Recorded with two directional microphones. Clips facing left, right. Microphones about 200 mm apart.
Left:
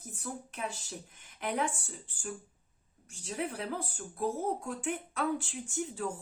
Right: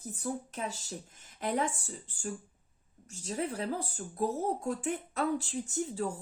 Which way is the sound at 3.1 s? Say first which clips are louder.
Right 2 dB; 40° right (ahead or behind).